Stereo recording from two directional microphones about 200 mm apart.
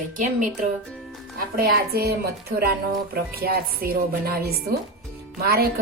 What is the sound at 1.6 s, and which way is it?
Speech, 50° right (ahead or behind).